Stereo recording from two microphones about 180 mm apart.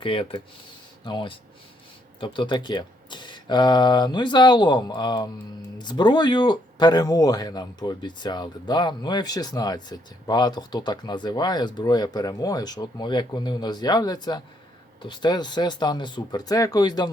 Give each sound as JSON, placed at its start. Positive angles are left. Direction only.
{"t": 0.0, "sound": "speech", "side_deg": 30}